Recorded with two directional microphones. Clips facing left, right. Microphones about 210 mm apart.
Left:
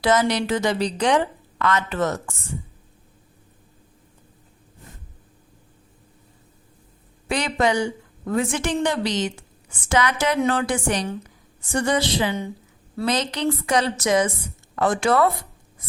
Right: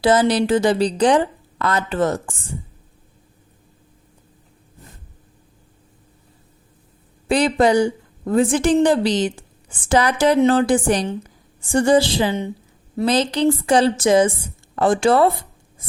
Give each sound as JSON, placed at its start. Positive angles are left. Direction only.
{"t": 0.0, "sound": "a woman's voice", "side_deg": -30}
{"t": 7.3, "sound": "a woman's voice", "side_deg": -35}